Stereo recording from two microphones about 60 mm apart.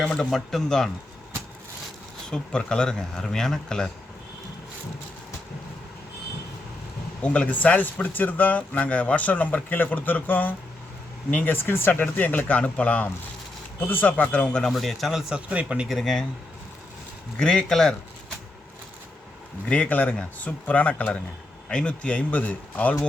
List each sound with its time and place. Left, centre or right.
0.0 s speech: centre
0.3 s speech: centre
2.3 s speech: centre
7.2 s speech: left
11.9 s speech: left
13.7 s speech: left; by 14.7 s centre
14.7 s speech: centre
15.4 s speech: right
15.9 s speech: centre
17.4 s speech: centre
19.6 s speech: left